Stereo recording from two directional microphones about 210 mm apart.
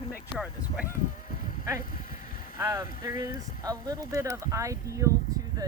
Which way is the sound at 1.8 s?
40° left (ahead or behind).